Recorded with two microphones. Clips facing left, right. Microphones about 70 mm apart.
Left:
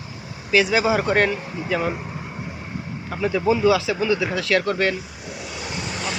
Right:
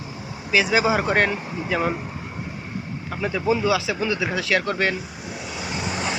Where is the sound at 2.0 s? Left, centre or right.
Centre.